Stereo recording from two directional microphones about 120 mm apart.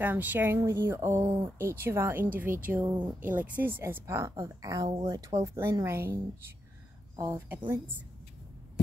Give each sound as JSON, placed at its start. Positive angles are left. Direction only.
{"t": 0.0, "sound": "a woman's voice", "side_deg": -15}
{"t": 7.2, "sound": "a woman's voice", "side_deg": -25}